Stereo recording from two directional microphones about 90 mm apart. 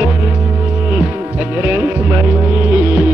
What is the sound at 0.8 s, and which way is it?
Music, 15° right (ahead or behind).